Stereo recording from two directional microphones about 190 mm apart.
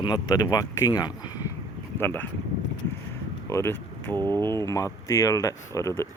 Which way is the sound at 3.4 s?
15° left (ahead or behind).